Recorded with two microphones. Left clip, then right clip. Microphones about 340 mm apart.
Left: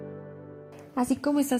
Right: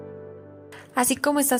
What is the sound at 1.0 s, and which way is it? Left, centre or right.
Speech, right.